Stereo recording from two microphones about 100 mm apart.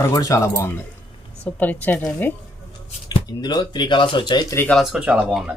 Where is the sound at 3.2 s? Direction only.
45° left (ahead or behind).